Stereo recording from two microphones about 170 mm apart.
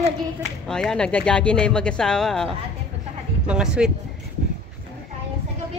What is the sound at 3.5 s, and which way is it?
Speech, 5° right (ahead or behind).